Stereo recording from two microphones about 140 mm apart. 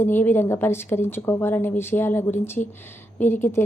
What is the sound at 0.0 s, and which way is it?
Speech, 15° left (ahead or behind).